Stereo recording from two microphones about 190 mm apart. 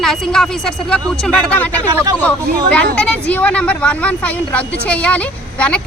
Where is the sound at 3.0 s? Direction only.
5° left (ahead or behind).